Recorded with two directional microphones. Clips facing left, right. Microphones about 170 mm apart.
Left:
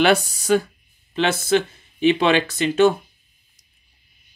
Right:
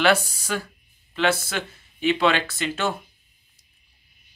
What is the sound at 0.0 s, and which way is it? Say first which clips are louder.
Speech: left 3 dB; 20° left (ahead or behind).